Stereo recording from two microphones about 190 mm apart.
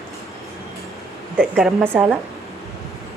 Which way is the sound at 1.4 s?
Centre (ahead or behind).